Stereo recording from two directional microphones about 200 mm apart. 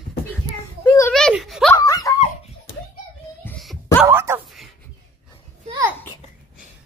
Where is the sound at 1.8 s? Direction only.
20° left (ahead or behind).